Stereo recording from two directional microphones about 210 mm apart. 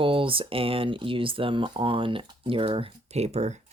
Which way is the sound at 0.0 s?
25° right (ahead or behind).